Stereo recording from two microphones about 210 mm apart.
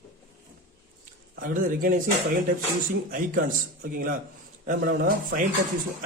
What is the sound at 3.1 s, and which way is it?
A man's voice, 45° right (ahead or behind).